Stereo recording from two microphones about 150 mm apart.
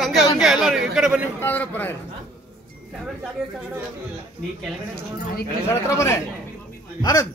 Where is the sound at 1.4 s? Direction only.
15° left (ahead or behind).